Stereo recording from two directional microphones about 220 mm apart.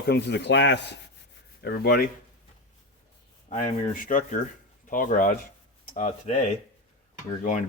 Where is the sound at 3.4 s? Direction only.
35° left (ahead or behind).